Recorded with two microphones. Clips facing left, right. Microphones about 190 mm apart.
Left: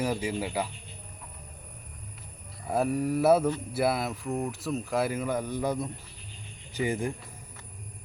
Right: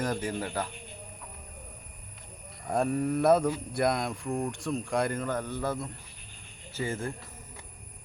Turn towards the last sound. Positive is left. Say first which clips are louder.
# left 4 dB
turn(degrees=15)  # may be behind; listen again after turning